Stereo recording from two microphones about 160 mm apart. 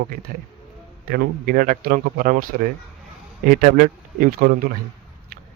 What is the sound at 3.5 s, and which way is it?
Speech, 60° right (ahead or behind).